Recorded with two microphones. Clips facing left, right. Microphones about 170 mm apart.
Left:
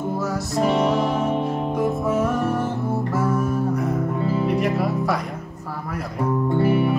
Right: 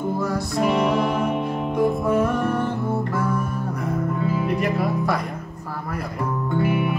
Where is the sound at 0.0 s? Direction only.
5° left (ahead or behind).